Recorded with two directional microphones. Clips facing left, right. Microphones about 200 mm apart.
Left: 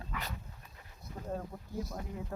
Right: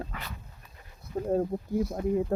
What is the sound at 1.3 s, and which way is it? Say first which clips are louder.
Speech: right 12 dB; 40° right (ahead or behind).